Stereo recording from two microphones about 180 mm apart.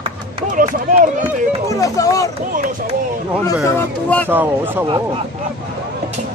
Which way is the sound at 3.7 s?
10° left (ahead or behind).